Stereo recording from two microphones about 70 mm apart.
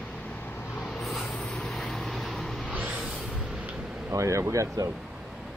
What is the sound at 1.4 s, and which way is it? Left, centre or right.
Vehicle, centre.